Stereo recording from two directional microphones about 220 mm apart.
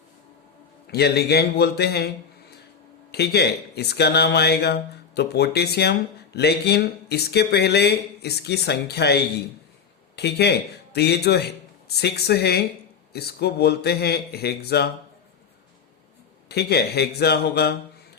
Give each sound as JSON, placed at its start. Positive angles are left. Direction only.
{"t": 0.9, "sound": "speech", "side_deg": 45}
{"t": 3.1, "sound": "speech", "side_deg": 45}
{"t": 16.5, "sound": "speech", "side_deg": 45}